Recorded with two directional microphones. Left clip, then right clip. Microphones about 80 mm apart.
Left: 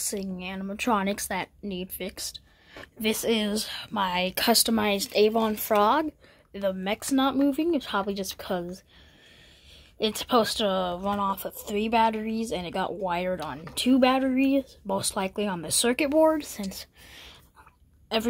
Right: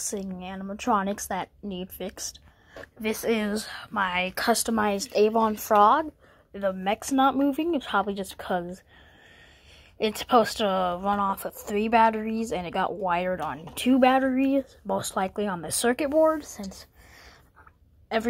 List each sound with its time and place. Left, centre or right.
0.6 s speech: left
1.3 s speech: centre
1.8 s speech: centre
3.1 s speech: left
3.7 s speech: left
4.6 s speech: left
4.9 s speech: centre
5.4 s speech: centre
6.5 s speech: centre
6.9 s speech: centre
9.9 s speech: centre; by 16.1 s left
16.3 s speech: left
18.0 s speech: left